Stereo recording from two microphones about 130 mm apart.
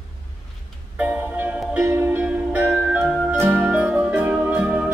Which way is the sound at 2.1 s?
10° right (ahead or behind).